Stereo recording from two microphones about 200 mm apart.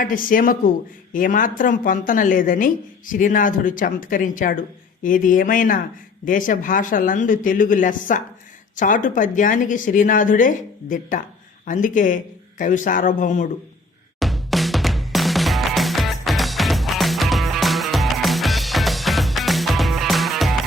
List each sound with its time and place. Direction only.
0.0 s a woman's voice: 45° left (ahead or behind)
14.2 s music: centre (ahead or behind)